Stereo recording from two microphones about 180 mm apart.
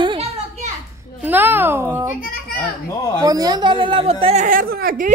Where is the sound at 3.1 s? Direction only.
20° right (ahead or behind).